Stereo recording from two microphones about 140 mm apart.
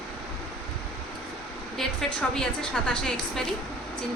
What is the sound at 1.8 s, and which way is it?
A woman's voice, 5° left (ahead or behind).